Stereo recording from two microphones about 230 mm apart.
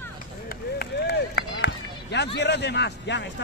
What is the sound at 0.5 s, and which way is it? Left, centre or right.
Run, left.